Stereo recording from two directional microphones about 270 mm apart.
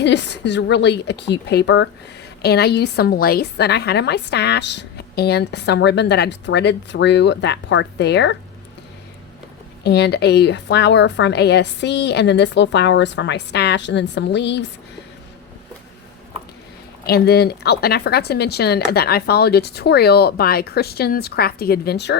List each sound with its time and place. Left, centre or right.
0.0 s a woman's voice: left
9.8 s a woman's voice: left
17.1 s a woman's voice: left